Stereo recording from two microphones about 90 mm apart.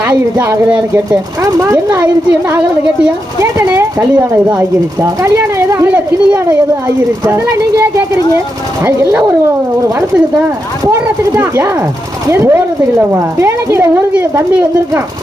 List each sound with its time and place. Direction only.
3.4 s speech: 25° right (ahead or behind)
5.0 s speech: 35° right (ahead or behind)
5.9 s speech: 20° right (ahead or behind)
11.3 s speech: 25° right (ahead or behind)